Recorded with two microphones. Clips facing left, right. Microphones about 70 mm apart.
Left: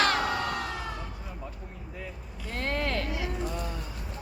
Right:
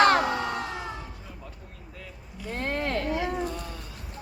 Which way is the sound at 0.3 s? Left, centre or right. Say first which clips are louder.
Right 1 dB; right.